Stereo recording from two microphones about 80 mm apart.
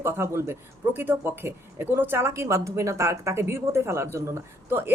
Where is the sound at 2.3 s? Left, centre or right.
Right.